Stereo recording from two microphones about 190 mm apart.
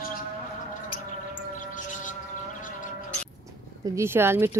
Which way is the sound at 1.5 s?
40° left (ahead or behind).